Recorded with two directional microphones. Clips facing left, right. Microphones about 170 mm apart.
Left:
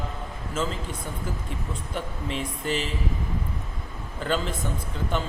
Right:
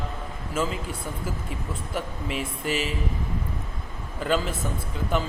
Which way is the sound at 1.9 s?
5° right (ahead or behind).